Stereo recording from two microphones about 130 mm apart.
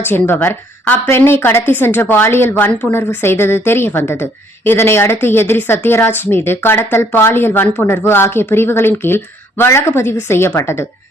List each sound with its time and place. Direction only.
0.0 s a woman's voice: 15° left (ahead or behind)